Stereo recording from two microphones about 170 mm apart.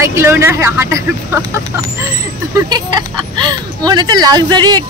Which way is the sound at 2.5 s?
25° right (ahead or behind).